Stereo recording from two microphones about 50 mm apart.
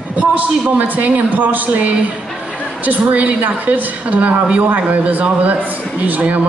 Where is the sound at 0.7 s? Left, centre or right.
Right.